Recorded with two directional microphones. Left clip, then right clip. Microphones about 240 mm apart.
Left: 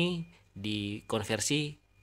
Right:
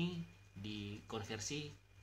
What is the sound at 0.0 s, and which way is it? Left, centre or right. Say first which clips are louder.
Speech: left 13 dB; left.